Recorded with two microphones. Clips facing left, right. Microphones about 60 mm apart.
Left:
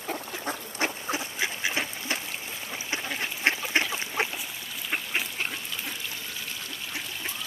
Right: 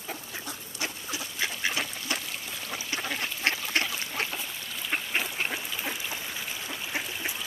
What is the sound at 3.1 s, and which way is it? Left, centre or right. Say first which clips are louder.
Duck: left 4 dB; centre.